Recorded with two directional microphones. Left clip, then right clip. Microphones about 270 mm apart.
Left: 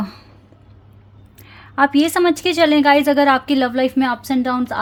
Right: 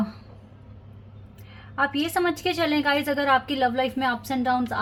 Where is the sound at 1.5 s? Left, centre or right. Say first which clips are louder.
Left 10 dB; left.